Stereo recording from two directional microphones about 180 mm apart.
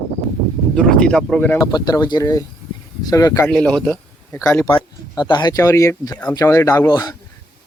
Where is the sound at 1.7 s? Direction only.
20° left (ahead or behind).